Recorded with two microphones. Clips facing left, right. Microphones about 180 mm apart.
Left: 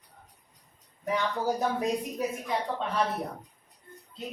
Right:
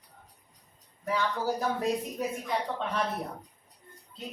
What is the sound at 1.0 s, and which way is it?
Speech, 20° left (ahead or behind).